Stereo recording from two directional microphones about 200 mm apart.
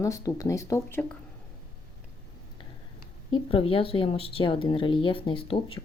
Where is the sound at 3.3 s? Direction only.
25° left (ahead or behind).